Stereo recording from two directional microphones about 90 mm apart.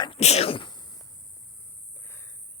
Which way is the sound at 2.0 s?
30° left (ahead or behind).